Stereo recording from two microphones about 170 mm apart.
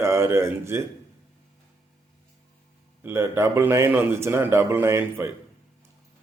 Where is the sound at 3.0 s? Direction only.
15° right (ahead or behind).